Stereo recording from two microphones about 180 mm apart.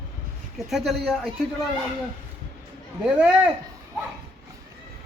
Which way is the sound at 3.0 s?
5° right (ahead or behind).